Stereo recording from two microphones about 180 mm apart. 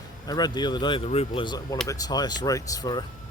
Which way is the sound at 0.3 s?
20° left (ahead or behind).